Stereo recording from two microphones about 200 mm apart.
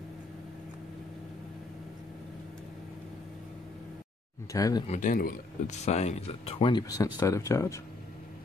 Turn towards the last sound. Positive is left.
turn(degrees=15)  # may be behind; listen again after turning